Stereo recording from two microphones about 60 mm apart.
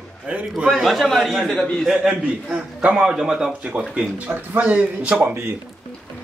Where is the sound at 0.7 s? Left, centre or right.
Centre.